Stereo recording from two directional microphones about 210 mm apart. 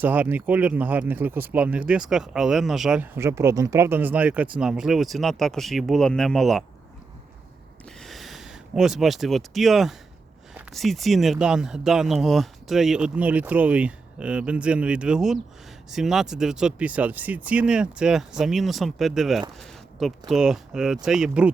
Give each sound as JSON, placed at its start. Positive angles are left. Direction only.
{"t": 0.0, "sound": "speech", "side_deg": -10}
{"t": 8.0, "sound": "speech", "side_deg": 0}